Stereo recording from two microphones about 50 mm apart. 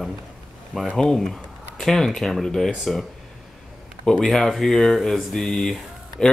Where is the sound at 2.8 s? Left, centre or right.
Centre.